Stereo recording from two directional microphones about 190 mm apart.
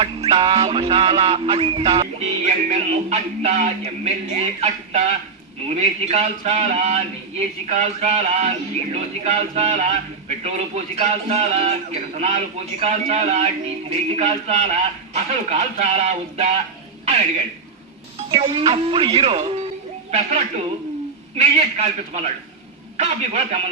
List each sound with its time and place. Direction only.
0.0 s a man's voice: 30° right (ahead or behind)
18.3 s a man's voice: 30° right (ahead or behind)